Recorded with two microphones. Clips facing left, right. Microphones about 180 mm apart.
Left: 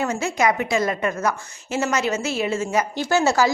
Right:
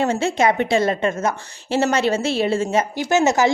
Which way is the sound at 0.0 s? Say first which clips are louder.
Right 3 dB; 30° right (ahead or behind).